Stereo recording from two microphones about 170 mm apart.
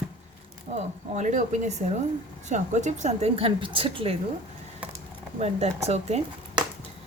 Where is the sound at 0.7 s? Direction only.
40° right (ahead or behind).